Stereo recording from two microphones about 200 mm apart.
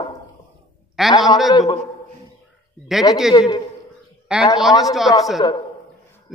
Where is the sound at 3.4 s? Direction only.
20° left (ahead or behind).